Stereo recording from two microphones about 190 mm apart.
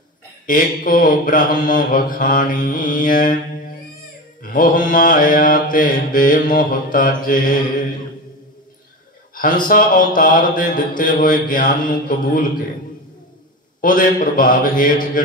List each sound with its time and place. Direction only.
0.5 s mantra: 45° left (ahead or behind)
4.4 s mantra: 45° left (ahead or behind)
9.3 s mantra: 45° left (ahead or behind)
13.7 s mantra: 45° left (ahead or behind)